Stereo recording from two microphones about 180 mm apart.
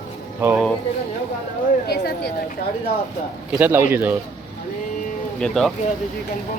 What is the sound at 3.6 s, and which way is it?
Speech, 10° right (ahead or behind).